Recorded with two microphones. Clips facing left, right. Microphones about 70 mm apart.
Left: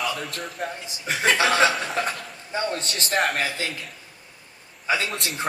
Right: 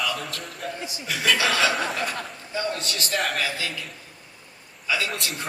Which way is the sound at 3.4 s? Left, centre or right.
Left.